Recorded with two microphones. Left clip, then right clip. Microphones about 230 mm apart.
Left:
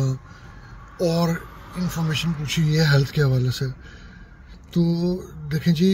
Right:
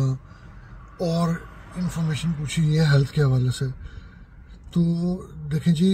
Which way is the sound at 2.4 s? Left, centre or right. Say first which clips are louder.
Left 1 dB; centre.